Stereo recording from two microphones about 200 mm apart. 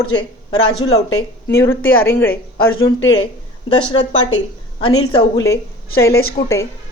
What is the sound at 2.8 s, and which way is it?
Speech, 25° left (ahead or behind).